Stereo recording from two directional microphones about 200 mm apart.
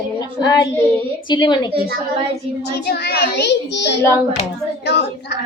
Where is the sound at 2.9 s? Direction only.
50° left (ahead or behind).